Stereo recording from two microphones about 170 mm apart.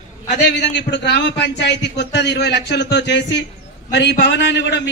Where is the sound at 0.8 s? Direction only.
90° left.